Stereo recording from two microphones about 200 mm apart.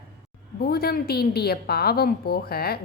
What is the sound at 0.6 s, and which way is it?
A woman's voice, 50° left (ahead or behind).